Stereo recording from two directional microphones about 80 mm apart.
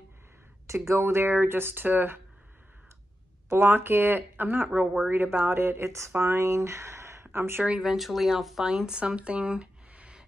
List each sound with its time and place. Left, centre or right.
0.7 s speech: right
3.4 s speech: right
7.8 s speech: centre